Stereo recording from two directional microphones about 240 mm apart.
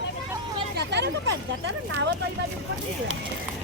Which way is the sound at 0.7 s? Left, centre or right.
Right.